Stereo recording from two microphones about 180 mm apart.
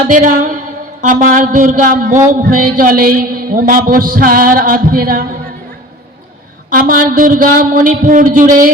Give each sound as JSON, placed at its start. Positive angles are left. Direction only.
{"t": 0.0, "sound": "a man's voice", "side_deg": -45}
{"t": 6.7, "sound": "a man's voice", "side_deg": -50}